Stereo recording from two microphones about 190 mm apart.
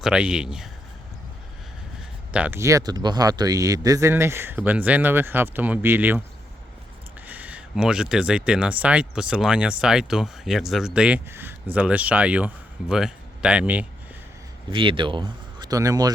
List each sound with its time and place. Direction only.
0.0 s speech: 5° right (ahead or behind)
2.3 s speech: 10° right (ahead or behind)
7.3 s speech: 10° right (ahead or behind)
14.7 s speech: 25° right (ahead or behind)